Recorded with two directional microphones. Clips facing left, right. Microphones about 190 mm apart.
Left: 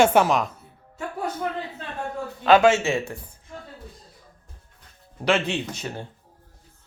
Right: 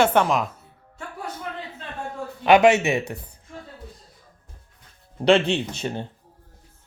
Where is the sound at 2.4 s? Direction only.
15° right (ahead or behind).